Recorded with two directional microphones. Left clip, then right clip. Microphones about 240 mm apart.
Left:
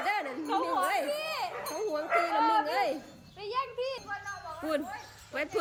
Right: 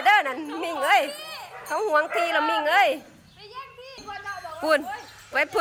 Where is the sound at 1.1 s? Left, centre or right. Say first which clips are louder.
Left 4 dB; left.